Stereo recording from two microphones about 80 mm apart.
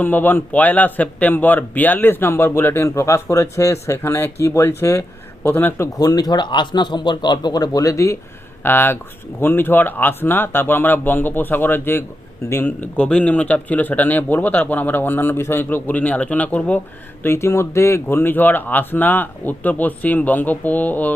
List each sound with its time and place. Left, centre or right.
0.0 s a man's voice: left
6.0 s speech: left
8.6 s a man's voice: left
17.2 s a man's voice: left